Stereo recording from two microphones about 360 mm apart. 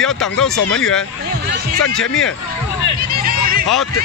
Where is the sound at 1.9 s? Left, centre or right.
Left.